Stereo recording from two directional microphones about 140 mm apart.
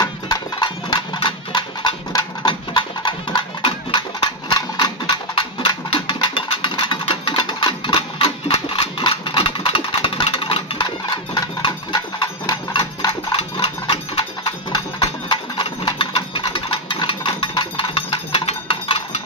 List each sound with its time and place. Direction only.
0.0 s clip-clop: 30° left (ahead or behind)
15.2 s engine: 35° left (ahead or behind)